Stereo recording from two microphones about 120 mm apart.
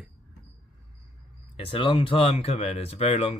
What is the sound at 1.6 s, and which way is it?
Speech, 45° left (ahead or behind).